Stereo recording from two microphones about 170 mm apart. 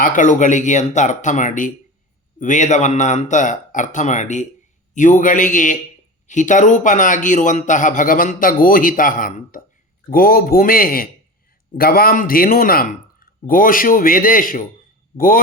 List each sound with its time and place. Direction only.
0.0 s speech: 50° left (ahead or behind)